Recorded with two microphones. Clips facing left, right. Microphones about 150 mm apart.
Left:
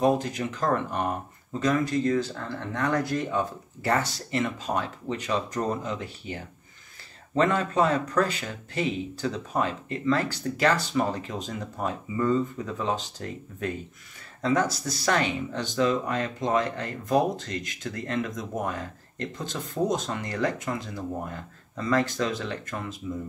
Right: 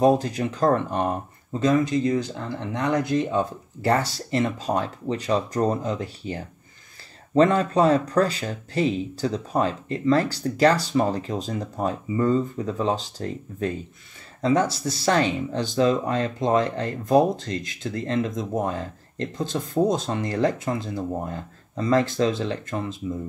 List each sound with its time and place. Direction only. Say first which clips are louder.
0.0 s speech: right 4 dB; 35° right (ahead or behind)